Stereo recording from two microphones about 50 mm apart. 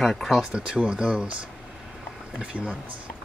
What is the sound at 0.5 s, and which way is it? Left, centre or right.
Speech, centre.